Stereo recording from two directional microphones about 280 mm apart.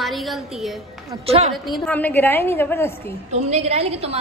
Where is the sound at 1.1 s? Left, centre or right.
Right.